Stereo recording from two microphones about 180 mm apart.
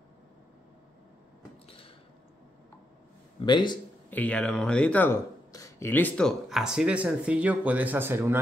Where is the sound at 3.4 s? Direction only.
25° left (ahead or behind).